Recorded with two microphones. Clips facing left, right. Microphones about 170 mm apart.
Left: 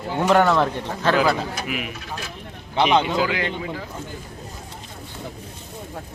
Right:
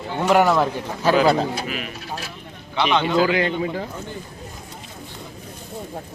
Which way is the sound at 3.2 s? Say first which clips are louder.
Right 5 dB; 35° right (ahead or behind).